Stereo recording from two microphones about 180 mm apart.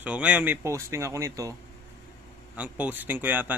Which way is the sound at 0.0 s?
10° right (ahead or behind).